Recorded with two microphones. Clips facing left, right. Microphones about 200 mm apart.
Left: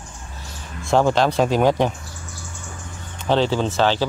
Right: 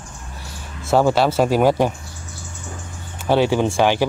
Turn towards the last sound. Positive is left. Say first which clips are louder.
# right 2 dB
turn(degrees=-15)  # may be behind; listen again after turning